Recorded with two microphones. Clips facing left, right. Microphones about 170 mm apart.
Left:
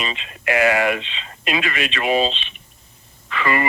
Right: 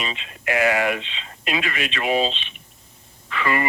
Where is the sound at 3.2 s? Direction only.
90° left.